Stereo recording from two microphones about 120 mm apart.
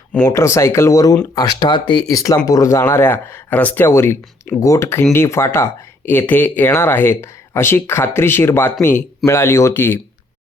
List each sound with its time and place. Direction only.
0.3 s speech: 25° left (ahead or behind)